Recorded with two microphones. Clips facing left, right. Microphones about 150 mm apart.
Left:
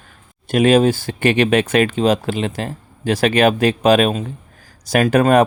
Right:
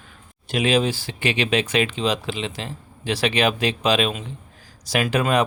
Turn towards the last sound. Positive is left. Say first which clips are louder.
# left 7 dB
turn(degrees=45)  # may be behind; listen again after turning